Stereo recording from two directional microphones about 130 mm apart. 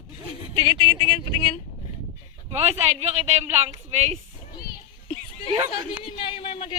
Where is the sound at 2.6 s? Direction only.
55° right (ahead or behind).